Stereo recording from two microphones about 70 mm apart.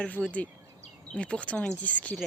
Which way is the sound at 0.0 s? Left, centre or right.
Centre.